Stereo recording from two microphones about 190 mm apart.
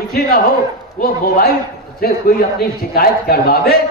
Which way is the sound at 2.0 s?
55° left (ahead or behind).